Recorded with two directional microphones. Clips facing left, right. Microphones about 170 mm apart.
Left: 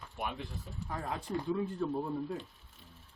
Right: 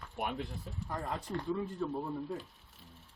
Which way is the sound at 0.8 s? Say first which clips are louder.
Even; 5° left (ahead or behind).